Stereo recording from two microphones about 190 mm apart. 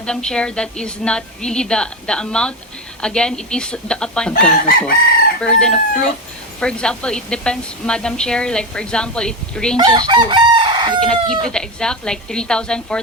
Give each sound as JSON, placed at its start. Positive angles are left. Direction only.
{"t": 0.0, "sound": "a woman's voice", "side_deg": 5}
{"t": 9.7, "sound": "chicken", "side_deg": -25}
{"t": 11.0, "sound": "a woman's voice", "side_deg": 5}